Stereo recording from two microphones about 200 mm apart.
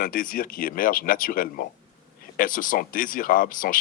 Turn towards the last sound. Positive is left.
turn(degrees=45)  # may be behind; listen again after turning